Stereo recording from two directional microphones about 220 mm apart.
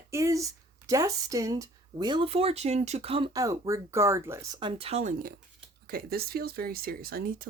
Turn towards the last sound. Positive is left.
turn(degrees=-40)  # may be behind; listen again after turning